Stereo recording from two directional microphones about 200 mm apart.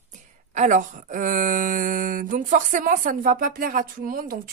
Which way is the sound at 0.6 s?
40° right (ahead or behind).